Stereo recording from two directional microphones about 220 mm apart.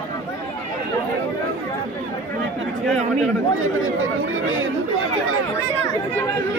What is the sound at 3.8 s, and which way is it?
Speech, 70° right (ahead or behind).